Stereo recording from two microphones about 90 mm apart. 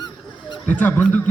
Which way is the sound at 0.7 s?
20° left (ahead or behind).